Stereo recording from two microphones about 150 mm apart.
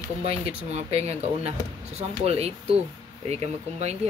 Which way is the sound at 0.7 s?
45° right (ahead or behind).